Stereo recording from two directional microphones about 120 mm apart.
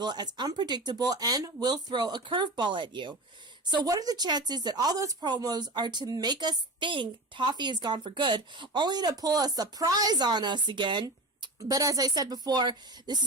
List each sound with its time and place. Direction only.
0.0 s speech: 35° right (ahead or behind)
11.7 s speech: 30° right (ahead or behind)